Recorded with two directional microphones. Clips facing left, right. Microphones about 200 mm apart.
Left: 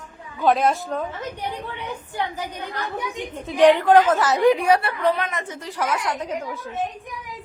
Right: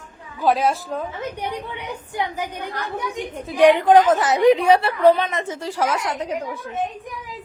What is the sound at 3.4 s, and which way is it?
A woman's voice, 10° right (ahead or behind).